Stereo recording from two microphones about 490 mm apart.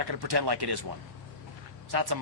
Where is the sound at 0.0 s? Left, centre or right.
Right.